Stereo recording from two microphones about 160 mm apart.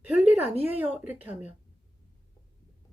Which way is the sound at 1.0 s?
10° right (ahead or behind).